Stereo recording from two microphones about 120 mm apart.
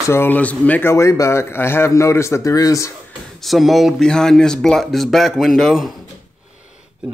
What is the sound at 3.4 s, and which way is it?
Speech, centre (ahead or behind).